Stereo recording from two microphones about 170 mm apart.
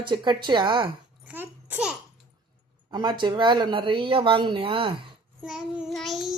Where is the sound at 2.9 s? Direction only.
25° right (ahead or behind).